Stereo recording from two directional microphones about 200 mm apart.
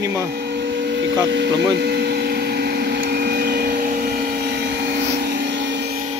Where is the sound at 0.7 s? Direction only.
60° right (ahead or behind).